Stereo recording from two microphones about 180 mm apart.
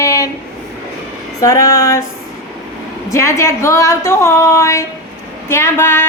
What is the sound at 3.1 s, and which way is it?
A man's voice, 15° left (ahead or behind).